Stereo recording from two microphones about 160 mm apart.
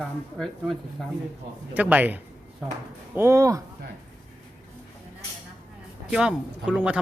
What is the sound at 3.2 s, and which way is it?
Speech, 15° right (ahead or behind).